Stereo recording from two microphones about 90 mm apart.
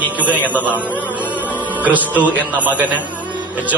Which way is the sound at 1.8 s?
20° right (ahead or behind).